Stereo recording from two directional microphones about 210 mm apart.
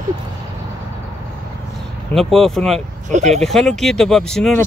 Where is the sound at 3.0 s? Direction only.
35° right (ahead or behind).